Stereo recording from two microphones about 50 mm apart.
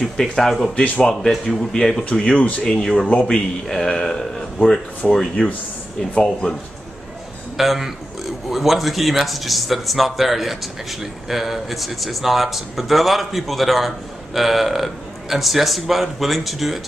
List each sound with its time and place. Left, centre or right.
0.0 s a man's voice: centre
2.0 s speech: left
3.1 s speech: centre
3.6 s a man's voice: centre
7.5 s a man's voice: centre